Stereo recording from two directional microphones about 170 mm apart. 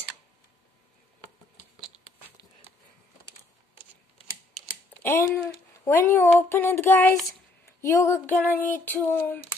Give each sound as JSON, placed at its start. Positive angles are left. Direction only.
{"t": 5.0, "sound": "speech", "side_deg": 15}